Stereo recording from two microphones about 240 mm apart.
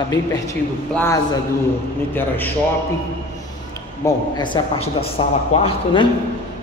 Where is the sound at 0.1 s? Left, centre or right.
Centre.